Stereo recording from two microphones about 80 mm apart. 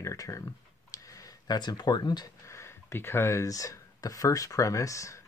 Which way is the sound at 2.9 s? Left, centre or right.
Left.